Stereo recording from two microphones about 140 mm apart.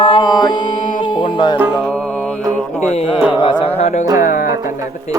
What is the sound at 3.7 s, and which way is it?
Music, 55° left (ahead or behind).